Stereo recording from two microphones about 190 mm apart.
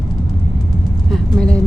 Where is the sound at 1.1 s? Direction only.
5° left (ahead or behind).